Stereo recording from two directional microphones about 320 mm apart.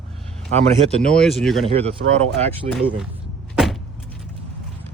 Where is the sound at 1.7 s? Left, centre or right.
Centre.